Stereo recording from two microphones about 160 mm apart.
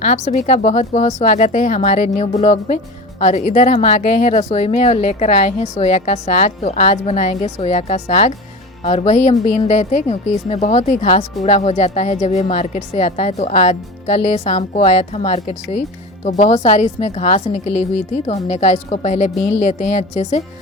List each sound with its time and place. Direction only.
0.0 s a woman's voice: 45° left (ahead or behind)